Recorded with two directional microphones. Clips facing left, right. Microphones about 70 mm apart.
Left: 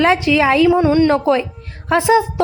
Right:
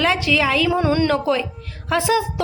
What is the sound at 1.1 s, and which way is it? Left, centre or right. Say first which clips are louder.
A woman's voice: left 5 dB; left.